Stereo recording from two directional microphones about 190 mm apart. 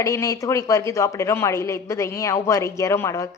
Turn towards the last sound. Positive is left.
turn(degrees=15)  # may be behind; listen again after turning